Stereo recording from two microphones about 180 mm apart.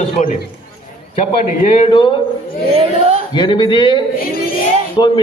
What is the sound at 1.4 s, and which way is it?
Speech, 40° left (ahead or behind).